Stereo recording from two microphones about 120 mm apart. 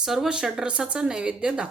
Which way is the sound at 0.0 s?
5° right (ahead or behind).